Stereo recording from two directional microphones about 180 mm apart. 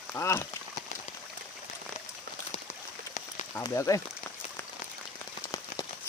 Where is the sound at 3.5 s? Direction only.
15° left (ahead or behind).